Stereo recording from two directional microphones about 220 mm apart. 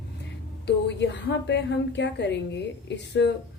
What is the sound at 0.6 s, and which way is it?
Speech, 50° left (ahead or behind).